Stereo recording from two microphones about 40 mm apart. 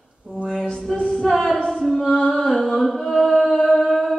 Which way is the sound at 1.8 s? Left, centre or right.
Centre.